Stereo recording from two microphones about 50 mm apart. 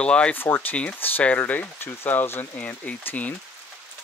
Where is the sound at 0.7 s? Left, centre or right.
Left.